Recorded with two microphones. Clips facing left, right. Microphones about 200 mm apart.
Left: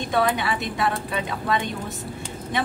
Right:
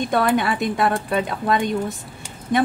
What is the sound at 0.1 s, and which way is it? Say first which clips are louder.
A woman's voice: right 2 dB; 50° right (ahead or behind).